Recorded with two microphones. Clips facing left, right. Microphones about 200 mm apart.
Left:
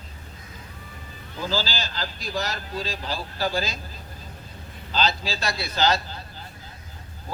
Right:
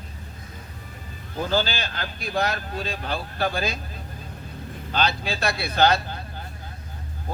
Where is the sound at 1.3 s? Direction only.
55° right (ahead or behind).